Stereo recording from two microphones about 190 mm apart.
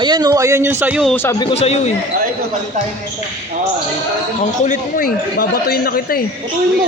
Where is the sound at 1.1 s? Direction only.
15° left (ahead or behind).